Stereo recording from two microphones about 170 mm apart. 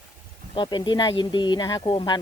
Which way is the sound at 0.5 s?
25° left (ahead or behind).